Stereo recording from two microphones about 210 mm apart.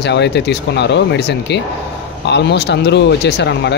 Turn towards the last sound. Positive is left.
turn(degrees=55)  # may be behind; listen again after turning